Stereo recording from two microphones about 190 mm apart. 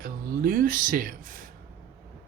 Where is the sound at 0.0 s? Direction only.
45° right (ahead or behind).